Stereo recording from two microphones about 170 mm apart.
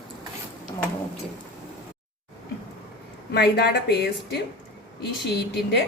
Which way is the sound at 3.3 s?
70° left (ahead or behind).